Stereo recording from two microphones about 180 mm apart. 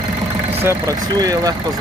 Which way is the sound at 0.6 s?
20° right (ahead or behind).